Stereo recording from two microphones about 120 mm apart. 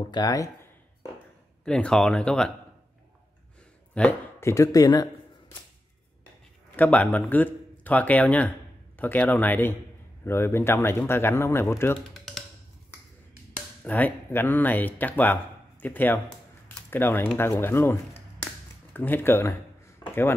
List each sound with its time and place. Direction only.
0.1 s speech: 30° left (ahead or behind)
1.6 s speech: 5° left (ahead or behind)
3.9 s speech: 10° left (ahead or behind)
4.4 s speech: 25° left (ahead or behind)
6.8 s speech: 10° left (ahead or behind)
12.1 s typing: centre (ahead or behind)
13.8 s speech: 15° left (ahead or behind)
18.9 s speech: 15° left (ahead or behind)